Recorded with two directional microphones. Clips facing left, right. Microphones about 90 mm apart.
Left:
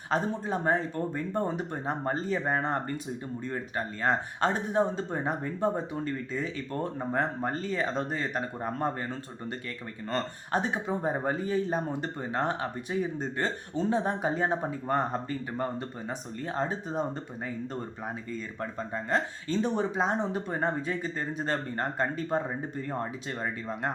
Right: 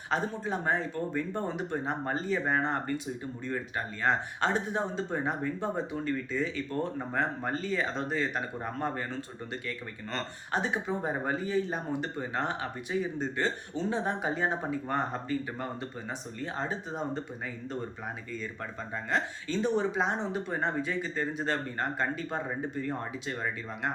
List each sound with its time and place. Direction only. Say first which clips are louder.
0.1 s speech: left 2 dB; 35° left (ahead or behind)
16.0 s speech: left 2 dB; 40° left (ahead or behind)
18.9 s speech: left 2 dB; 35° left (ahead or behind)
22.4 s speech: right 1 dB; 25° left (ahead or behind)